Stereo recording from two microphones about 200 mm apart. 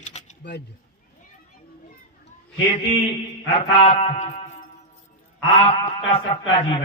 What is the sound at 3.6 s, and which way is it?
Speech, 30° left (ahead or behind).